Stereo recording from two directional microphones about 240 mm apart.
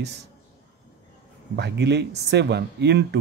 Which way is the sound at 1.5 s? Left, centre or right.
Right.